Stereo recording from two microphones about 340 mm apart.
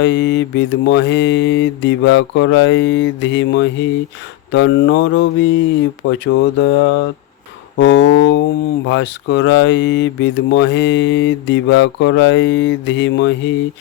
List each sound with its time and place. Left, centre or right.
0.0 s speech: left